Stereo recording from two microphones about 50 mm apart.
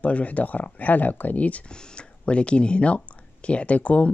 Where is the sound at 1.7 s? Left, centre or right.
Centre.